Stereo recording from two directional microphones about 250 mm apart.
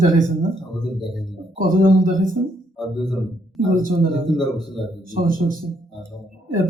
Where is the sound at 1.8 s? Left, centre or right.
Right.